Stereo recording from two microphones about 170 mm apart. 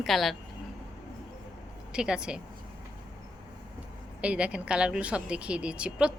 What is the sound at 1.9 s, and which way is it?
Speech, 5° right (ahead or behind).